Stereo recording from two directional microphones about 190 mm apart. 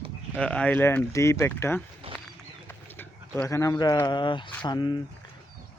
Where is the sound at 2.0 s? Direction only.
30° right (ahead or behind).